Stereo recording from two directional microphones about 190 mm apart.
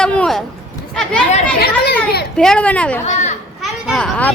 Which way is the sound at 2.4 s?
5° left (ahead or behind).